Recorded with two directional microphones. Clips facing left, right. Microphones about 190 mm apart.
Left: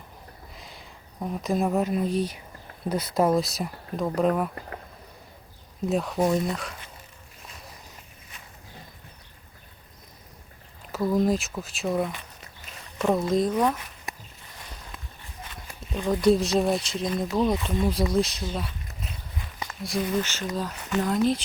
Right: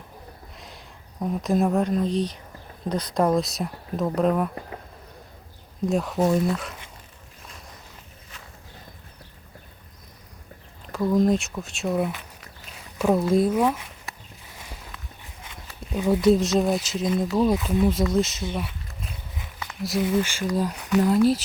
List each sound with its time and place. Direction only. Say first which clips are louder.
0.5 s speech: right 1 dB; centre (ahead or behind)
5.8 s speech: right 2 dB; centre (ahead or behind)
10.8 s speech: right 2 dB; 5° left (ahead or behind)
15.9 s speech: right 2 dB; 10° right (ahead or behind)
19.6 s speech: right 4 dB; centre (ahead or behind)